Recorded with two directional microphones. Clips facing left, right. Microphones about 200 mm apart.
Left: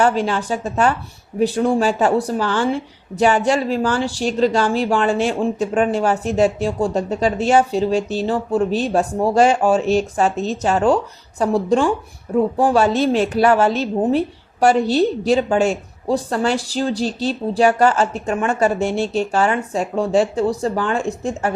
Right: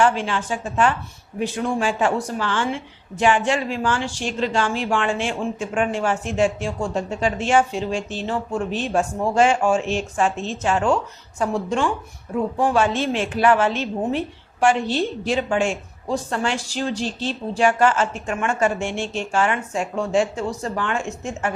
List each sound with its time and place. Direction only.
0.0 s a woman's voice: 40° left (ahead or behind)